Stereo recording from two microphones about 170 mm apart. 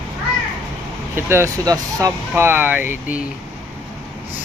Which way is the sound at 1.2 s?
15° right (ahead or behind).